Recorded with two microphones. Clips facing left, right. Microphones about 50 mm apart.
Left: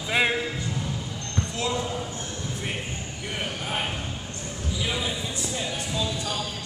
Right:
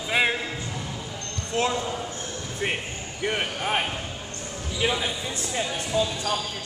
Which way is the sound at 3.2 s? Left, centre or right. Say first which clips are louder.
Right 6 dB; right.